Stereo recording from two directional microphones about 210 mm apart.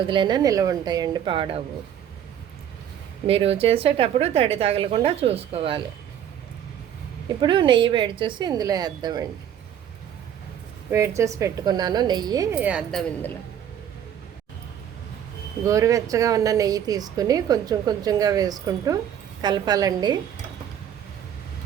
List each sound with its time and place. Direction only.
0.1 s a woman's voice: 20° right (ahead or behind)
3.2 s a woman's voice: 30° right (ahead or behind)
7.4 s a woman's voice: 20° right (ahead or behind)
10.9 s a woman's voice: 15° right (ahead or behind); by 13.3 s centre (ahead or behind)
15.6 s a woman's voice: 15° right (ahead or behind)